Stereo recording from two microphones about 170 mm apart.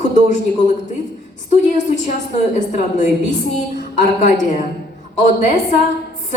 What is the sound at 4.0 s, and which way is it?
Speech, 45° left (ahead or behind).